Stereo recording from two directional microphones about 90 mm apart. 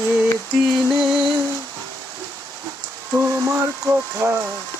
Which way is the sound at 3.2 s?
30° right (ahead or behind).